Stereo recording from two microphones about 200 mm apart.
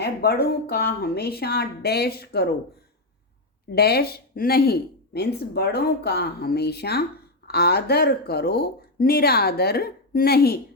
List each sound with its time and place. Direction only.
0.0 s speech: 50° left (ahead or behind)
3.7 s speech: 55° left (ahead or behind)